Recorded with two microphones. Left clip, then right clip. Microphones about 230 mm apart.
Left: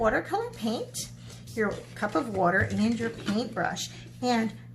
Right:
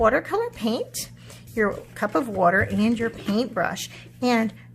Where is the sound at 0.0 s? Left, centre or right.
Right.